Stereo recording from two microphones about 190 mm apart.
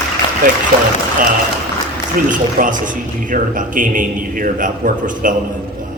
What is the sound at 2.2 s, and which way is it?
Music, 45° right (ahead or behind).